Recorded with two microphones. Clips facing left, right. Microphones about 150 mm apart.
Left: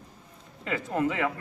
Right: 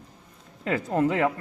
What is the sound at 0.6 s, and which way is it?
Speech, 40° right (ahead or behind).